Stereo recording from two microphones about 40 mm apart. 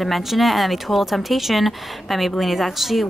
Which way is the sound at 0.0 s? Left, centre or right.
Centre.